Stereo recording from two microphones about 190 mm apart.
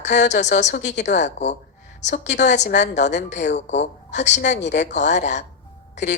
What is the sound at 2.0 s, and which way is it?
A woman's voice, 40° left (ahead or behind).